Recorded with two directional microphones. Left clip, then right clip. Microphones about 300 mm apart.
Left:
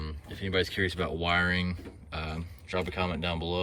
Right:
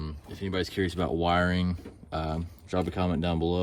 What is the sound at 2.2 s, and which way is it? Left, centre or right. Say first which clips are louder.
Speech: right 2 dB; centre.